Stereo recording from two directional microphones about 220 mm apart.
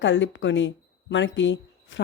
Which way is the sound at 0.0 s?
55° left (ahead or behind).